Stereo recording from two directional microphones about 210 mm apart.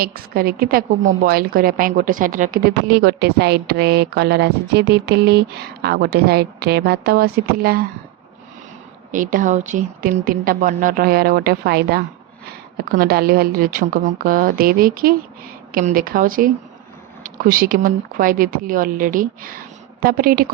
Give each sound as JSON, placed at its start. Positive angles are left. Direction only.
{"t": 0.0, "sound": "a woman's voice", "side_deg": -45}
{"t": 9.1, "sound": "a woman's voice", "side_deg": -40}